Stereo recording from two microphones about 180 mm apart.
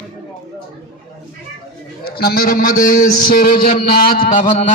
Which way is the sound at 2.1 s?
60° left (ahead or behind).